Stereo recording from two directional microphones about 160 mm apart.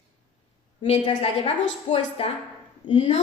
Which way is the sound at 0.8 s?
40° left (ahead or behind).